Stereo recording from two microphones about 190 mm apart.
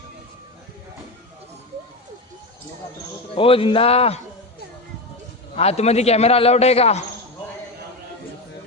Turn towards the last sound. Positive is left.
turn(degrees=35)  # may be behind; listen again after turning